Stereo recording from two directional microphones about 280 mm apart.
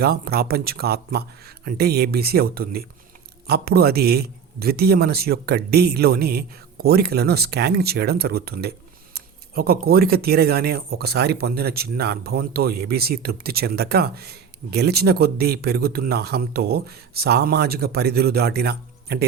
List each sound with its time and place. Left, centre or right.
0.0 s speech: right